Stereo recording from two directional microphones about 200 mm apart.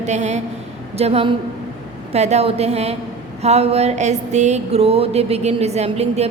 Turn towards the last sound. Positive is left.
turn(degrees=-30)  # may be behind; listen again after turning